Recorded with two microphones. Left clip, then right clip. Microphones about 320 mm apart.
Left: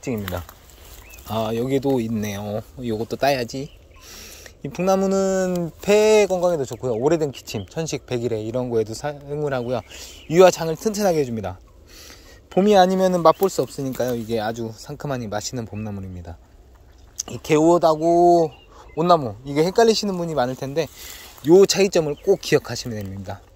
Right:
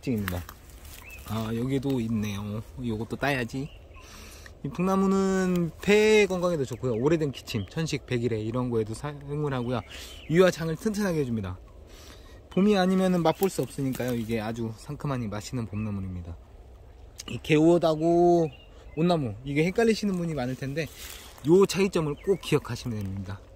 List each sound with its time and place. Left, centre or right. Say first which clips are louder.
1.3 s speech: left 9 dB; centre
12.5 s speech: left 9 dB; centre
17.2 s speech: left 5 dB; centre
19.4 s speech: left 7 dB; left
19.7 s speech: left 9 dB; centre